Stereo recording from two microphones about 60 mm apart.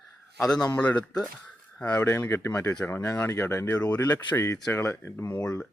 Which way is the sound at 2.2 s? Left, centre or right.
Left.